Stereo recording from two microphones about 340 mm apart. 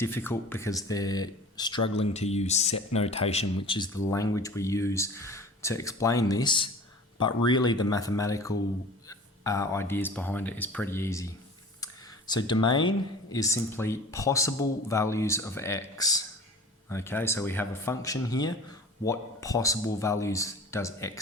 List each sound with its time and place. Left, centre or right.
0.0 s speech: centre
11.8 s a sound: centre
13.3 s speech: centre